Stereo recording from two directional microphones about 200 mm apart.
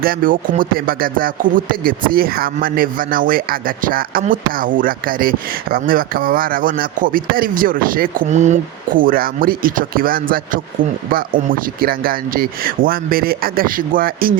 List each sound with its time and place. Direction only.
0.0 s speech: 45° right (ahead or behind)